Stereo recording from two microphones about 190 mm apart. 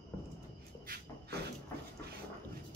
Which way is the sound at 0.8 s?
55° right (ahead or behind).